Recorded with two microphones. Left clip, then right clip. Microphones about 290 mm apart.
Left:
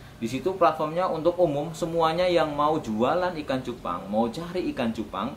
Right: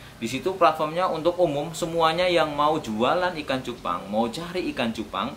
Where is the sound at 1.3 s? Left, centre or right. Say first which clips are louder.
Right 1 dB; left.